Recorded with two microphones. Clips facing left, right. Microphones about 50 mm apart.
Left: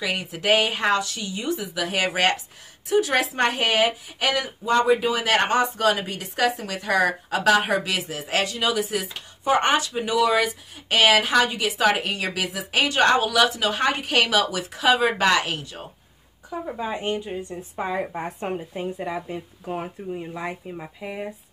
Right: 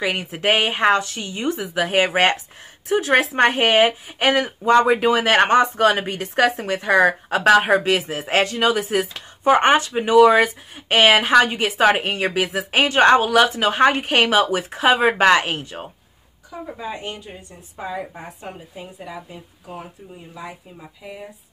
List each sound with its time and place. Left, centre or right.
0.0 s speech: right
16.4 s speech: centre; by 21.3 s left